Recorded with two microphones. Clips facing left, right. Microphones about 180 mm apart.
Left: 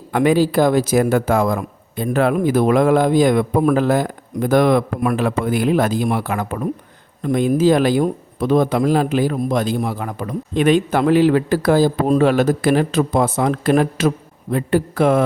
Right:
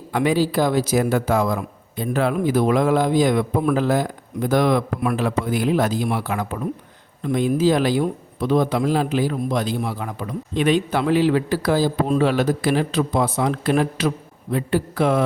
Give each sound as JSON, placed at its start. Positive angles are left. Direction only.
{"t": 0.1, "sound": "speech", "side_deg": 50}